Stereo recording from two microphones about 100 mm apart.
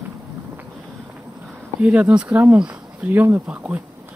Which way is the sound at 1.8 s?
15° right (ahead or behind).